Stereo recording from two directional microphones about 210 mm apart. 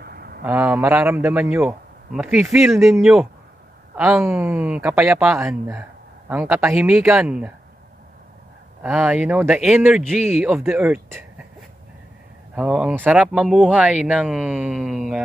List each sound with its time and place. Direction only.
0.0 s a sound: 45° right (ahead or behind)
0.4 s a man's voice: 10° right (ahead or behind)
8.8 s a man's voice: 10° right (ahead or behind)
12.5 s speech: 5° right (ahead or behind)